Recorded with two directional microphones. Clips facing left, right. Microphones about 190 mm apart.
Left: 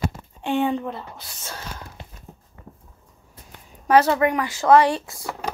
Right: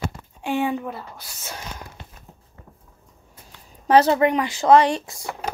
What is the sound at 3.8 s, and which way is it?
Speech, 25° right (ahead or behind).